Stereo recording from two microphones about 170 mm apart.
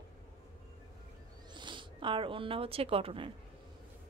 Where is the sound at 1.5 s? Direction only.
30° right (ahead or behind).